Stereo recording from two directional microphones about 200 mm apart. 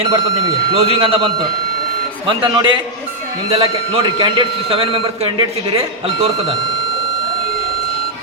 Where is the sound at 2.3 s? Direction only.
25° right (ahead or behind).